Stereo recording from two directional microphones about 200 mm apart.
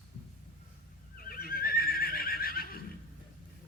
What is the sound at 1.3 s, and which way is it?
Neigh, 45° left (ahead or behind).